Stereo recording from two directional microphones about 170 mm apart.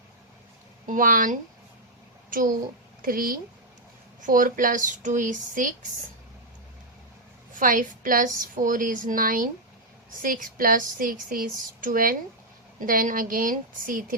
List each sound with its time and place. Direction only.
0.9 s a woman's voice: 50° right (ahead or behind)
3.0 s a woman's voice: 55° right (ahead or behind)
7.5 s a woman's voice: 50° right (ahead or behind)